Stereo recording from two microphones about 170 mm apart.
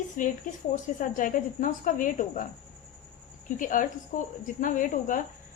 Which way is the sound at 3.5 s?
50° left (ahead or behind).